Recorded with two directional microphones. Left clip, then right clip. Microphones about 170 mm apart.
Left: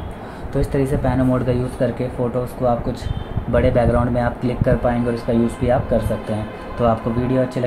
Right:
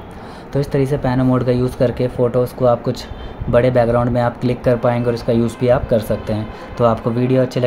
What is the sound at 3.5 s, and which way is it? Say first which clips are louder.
Speech: right 3 dB; 40° right (ahead or behind).